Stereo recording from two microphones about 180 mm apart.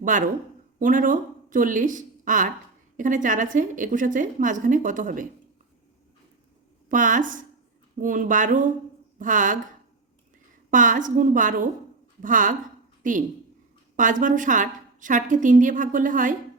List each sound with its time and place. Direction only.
0.0 s a woman's voice: 45° right (ahead or behind)
6.8 s a woman's voice: 45° right (ahead or behind)
10.7 s a woman's voice: 45° right (ahead or behind)